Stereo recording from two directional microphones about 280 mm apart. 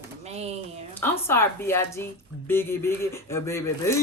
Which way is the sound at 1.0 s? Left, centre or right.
Centre.